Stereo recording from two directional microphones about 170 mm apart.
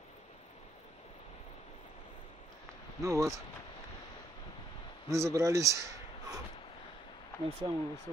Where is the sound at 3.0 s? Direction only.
15° right (ahead or behind).